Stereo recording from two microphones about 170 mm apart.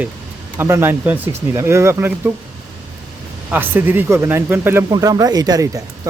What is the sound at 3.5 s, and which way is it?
Speech, 10° right (ahead or behind).